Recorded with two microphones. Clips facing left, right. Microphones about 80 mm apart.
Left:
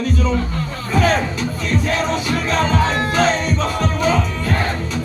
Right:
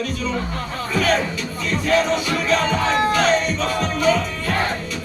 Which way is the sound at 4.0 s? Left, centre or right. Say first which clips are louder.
Right 1 dB; left.